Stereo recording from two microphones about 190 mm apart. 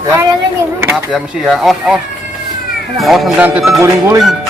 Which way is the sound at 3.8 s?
15° right (ahead or behind).